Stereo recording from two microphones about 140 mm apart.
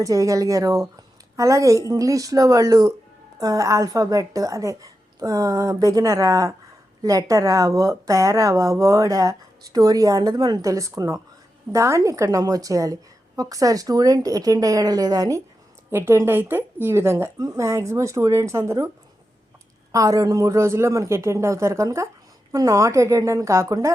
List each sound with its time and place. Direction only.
0.0 s speech: 25° right (ahead or behind)
19.9 s speech: 25° right (ahead or behind)